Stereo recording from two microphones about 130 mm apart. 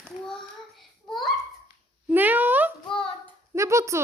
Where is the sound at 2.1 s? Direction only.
15° right (ahead or behind).